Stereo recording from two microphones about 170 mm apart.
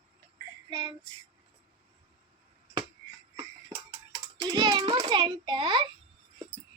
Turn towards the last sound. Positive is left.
turn(degrees=-30)  # may be behind; listen again after turning